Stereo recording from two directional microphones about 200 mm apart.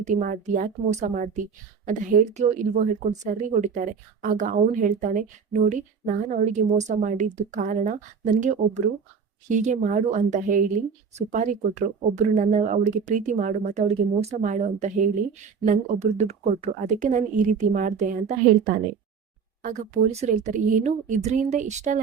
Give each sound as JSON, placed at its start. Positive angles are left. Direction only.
{"t": 0.0, "sound": "speech", "side_deg": -40}